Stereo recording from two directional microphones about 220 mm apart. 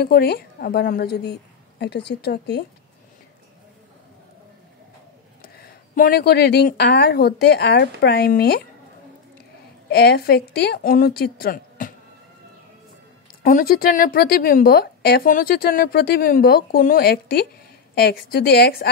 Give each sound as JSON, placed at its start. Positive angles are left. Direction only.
{"t": 0.0, "sound": "a woman's voice", "side_deg": 45}
{"t": 5.4, "sound": "a woman's voice", "side_deg": 40}
{"t": 9.8, "sound": "a woman's voice", "side_deg": 50}
{"t": 13.4, "sound": "a woman's voice", "side_deg": 40}